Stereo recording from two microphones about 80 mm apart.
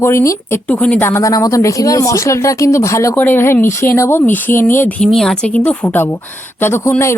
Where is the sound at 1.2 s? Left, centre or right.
Left.